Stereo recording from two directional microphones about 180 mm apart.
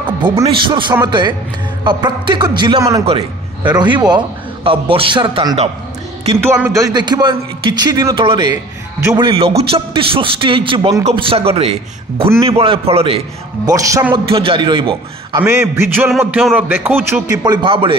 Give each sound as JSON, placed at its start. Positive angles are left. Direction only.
{"t": 0.4, "sound": "a man's voice", "side_deg": -30}
{"t": 6.4, "sound": "a man's voice", "side_deg": -5}
{"t": 6.7, "sound": "a man's voice", "side_deg": -20}
{"t": 13.7, "sound": "speech", "side_deg": -20}
{"t": 14.3, "sound": "a man's voice", "side_deg": -30}
{"t": 15.4, "sound": "speech", "side_deg": -15}
{"t": 16.1, "sound": "speech", "side_deg": 0}